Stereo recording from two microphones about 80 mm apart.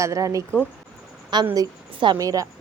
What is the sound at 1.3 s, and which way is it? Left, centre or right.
Speech, right.